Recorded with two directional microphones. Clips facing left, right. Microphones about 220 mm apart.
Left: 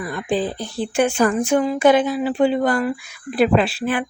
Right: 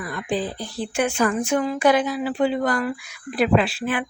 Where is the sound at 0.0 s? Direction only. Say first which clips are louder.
Left 4 dB; 30° left (ahead or behind).